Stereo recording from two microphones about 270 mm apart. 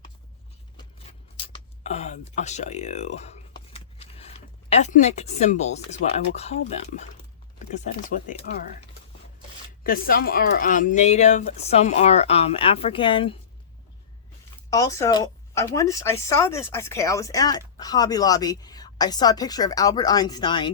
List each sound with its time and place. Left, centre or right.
1.4 s a sound: left
4.7 s speech: left
9.8 s speech: left
14.7 s a woman's voice: centre